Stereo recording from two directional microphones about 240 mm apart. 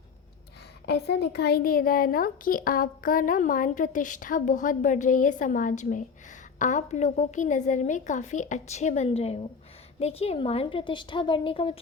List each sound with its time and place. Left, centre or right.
0.9 s a woman's voice: left